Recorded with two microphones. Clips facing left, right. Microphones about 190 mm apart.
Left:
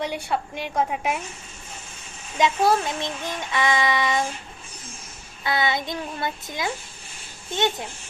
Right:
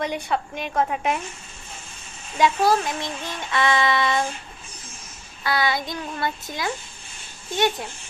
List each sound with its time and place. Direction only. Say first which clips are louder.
0.0 s child singing: right 1 dB; 10° left (ahead or behind)
2.4 s child singing: right 1 dB; 20° left (ahead or behind)
5.4 s child singing: right 1 dB; 20° left (ahead or behind)